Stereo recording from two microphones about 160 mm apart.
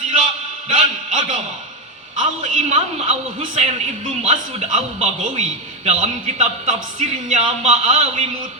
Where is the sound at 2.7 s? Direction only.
40° right (ahead or behind).